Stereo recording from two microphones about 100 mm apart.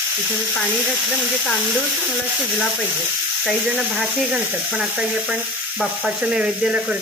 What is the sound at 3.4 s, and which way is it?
Speech, 10° right (ahead or behind).